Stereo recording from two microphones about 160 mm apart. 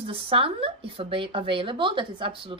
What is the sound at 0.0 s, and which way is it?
A woman's voice, 35° right (ahead or behind).